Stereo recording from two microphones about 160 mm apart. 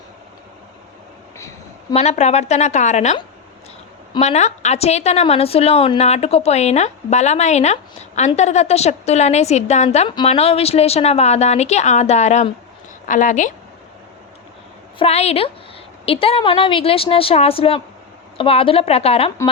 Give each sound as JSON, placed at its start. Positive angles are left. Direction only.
{"t": 1.9, "sound": "a woman's voice", "side_deg": 40}
{"t": 4.2, "sound": "a woman's voice", "side_deg": 45}
{"t": 14.9, "sound": "a woman's voice", "side_deg": 40}